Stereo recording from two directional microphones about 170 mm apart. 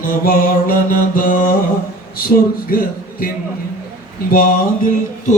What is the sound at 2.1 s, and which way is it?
Speech, 60° left (ahead or behind).